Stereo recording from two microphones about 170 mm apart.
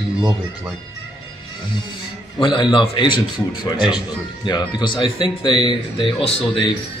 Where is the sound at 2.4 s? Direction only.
30° left (ahead or behind).